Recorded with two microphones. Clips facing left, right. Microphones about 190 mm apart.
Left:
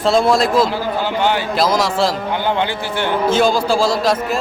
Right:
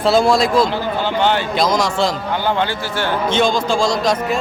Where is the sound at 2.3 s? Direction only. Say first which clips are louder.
Even; 20° left (ahead or behind).